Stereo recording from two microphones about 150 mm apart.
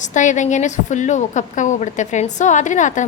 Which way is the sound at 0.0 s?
55° left (ahead or behind).